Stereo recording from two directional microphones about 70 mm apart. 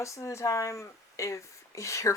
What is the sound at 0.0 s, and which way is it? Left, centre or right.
Speech, left.